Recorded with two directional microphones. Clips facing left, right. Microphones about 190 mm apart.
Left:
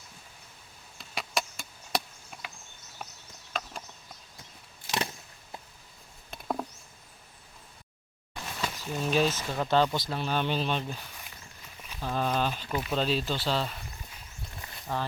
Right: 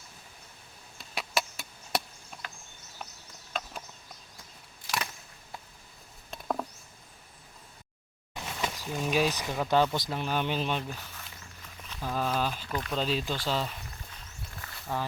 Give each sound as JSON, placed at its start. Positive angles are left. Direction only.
{"t": 0.9, "sound": "chop", "side_deg": 0}
{"t": 6.3, "sound": "mouse", "side_deg": 10}
{"t": 8.4, "sound": "speech", "side_deg": -15}
{"t": 10.8, "sound": "a sound", "side_deg": 15}
{"t": 12.0, "sound": "speech", "side_deg": -5}
{"t": 12.6, "sound": "speech", "side_deg": 10}
{"t": 13.0, "sound": "speech", "side_deg": -10}
{"t": 14.6, "sound": "a sound", "side_deg": 20}